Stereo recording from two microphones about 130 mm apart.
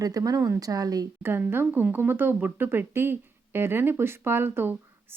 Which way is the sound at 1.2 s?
15° right (ahead or behind).